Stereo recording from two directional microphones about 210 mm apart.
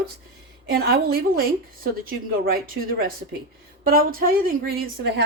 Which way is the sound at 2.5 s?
45° right (ahead or behind).